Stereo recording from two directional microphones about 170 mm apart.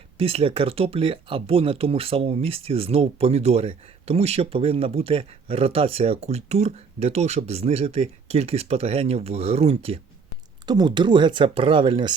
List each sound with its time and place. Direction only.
0.2 s speech: 35° right (ahead or behind)
10.7 s speech: 25° right (ahead or behind)